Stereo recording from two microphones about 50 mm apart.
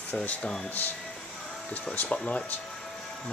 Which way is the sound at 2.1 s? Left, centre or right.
Left.